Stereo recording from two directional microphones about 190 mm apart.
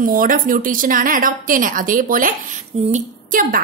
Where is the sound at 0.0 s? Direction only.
45° right (ahead or behind).